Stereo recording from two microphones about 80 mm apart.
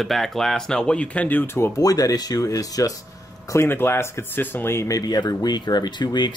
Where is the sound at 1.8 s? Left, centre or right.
Left.